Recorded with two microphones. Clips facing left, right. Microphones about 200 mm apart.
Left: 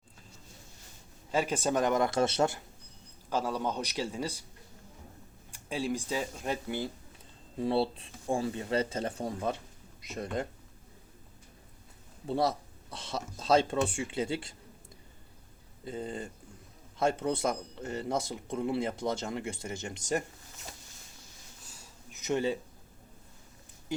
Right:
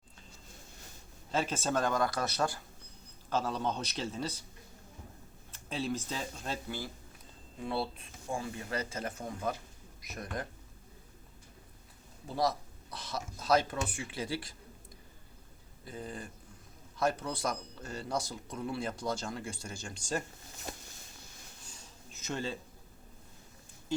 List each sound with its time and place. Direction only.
1.3 s speech: 10° left (ahead or behind)
3.2 s speech: 10° left (ahead or behind)
5.5 s speech: 10° left (ahead or behind)
7.6 s speech: 30° left (ahead or behind)
12.3 s speech: 30° left (ahead or behind)
15.8 s speech: 25° left (ahead or behind)
22.1 s a sound: 15° left (ahead or behind)